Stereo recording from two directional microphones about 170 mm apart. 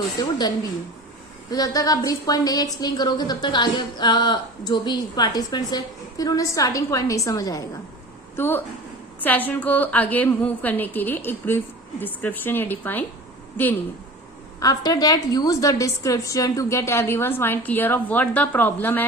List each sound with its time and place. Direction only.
0.2 s a woman's voice: 25° left (ahead or behind)